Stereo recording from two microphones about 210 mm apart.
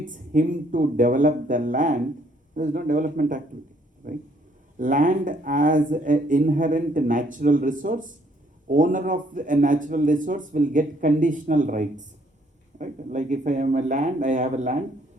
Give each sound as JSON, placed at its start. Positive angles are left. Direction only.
{"t": 0.0, "sound": "speech", "side_deg": -40}